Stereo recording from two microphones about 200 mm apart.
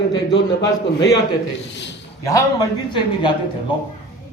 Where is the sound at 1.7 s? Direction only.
65° left (ahead or behind).